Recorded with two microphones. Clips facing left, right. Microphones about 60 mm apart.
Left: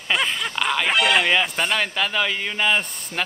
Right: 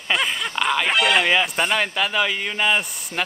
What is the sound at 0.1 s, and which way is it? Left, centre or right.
Speech, centre.